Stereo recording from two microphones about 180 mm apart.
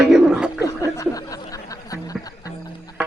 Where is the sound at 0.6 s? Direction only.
20° left (ahead or behind).